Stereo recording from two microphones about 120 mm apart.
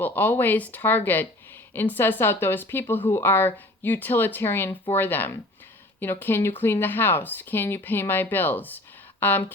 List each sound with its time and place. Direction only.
0.0 s speech: 15° left (ahead or behind)